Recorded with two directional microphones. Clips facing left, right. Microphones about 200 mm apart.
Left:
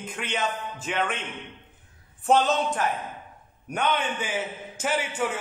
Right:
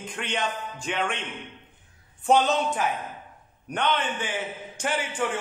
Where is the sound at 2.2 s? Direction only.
Centre (ahead or behind).